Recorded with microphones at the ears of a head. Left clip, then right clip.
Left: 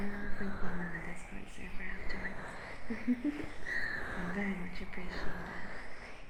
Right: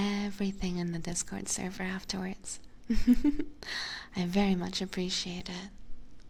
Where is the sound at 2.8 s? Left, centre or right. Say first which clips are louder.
Right 9 dB; right.